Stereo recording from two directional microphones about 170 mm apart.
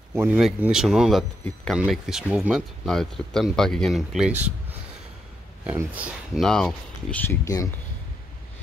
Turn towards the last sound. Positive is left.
turn(degrees=20)  # may be behind; listen again after turning